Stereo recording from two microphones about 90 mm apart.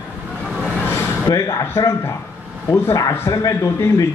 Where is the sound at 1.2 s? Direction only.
40° left (ahead or behind).